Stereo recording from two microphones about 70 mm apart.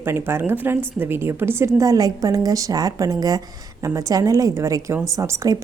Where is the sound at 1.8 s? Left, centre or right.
Right.